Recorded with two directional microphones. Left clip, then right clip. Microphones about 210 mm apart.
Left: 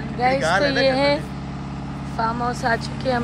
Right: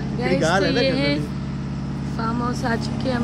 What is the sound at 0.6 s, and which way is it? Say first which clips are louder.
Speech: left 3 dB; 5° right (ahead or behind).